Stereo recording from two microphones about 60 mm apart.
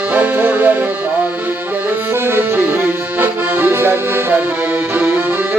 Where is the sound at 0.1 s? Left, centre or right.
Right.